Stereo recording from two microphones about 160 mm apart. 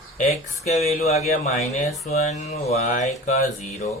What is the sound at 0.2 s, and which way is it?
Speech, 45° left (ahead or behind).